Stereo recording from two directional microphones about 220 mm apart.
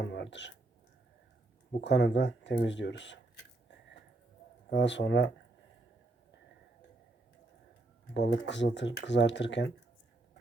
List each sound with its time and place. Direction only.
0.0 s speech: 50° left (ahead or behind)
1.8 s speech: 50° left (ahead or behind)
4.7 s speech: 50° left (ahead or behind)
8.1 s speech: 50° left (ahead or behind)